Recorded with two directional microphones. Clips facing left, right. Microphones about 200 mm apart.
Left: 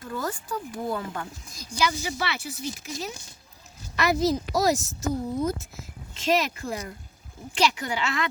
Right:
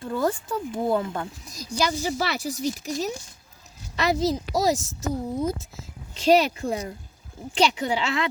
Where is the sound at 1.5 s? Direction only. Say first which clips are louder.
Right 2 dB; 40° right (ahead or behind).